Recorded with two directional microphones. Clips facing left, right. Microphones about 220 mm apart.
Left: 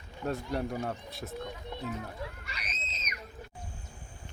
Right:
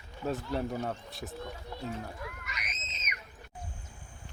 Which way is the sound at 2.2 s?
30° left (ahead or behind).